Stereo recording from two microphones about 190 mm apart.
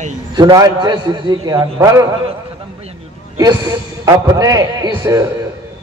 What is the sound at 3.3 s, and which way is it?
A man's voice, 20° right (ahead or behind).